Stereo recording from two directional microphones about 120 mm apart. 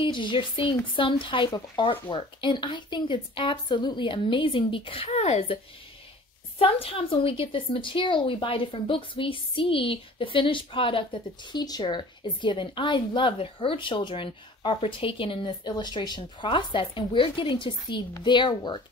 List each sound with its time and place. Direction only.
0.0 s a woman's voice: 40° left (ahead or behind)
6.6 s a woman's voice: 50° left (ahead or behind)